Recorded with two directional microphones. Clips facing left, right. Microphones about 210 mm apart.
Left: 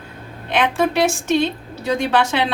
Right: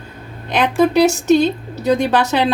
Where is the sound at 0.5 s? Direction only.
40° right (ahead or behind).